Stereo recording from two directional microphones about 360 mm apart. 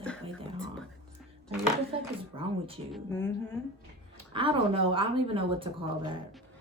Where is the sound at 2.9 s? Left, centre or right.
Centre.